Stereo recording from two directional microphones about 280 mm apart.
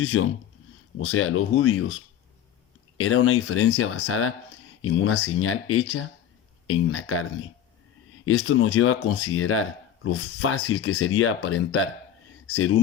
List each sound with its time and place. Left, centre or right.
0.0 s speech: left
3.0 s speech: left